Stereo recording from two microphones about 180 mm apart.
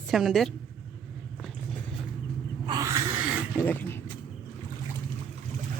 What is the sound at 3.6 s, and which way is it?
Vehicle, 10° left (ahead or behind).